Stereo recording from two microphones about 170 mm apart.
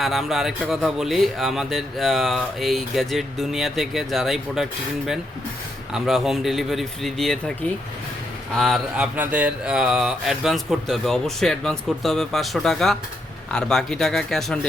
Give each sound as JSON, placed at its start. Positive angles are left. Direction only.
{"t": 0.0, "sound": "speech", "side_deg": 0}
{"t": 8.5, "sound": "speech", "side_deg": 0}